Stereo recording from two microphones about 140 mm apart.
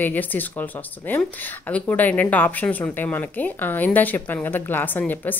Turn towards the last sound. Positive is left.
turn(degrees=10)  # may be behind; listen again after turning